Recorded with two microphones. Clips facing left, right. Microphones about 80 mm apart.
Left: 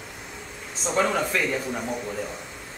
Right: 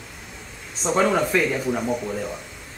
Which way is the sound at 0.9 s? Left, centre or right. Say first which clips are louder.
Right 4 dB; centre.